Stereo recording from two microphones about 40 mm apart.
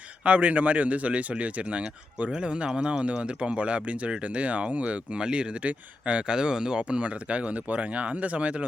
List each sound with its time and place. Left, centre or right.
0.3 s speech: right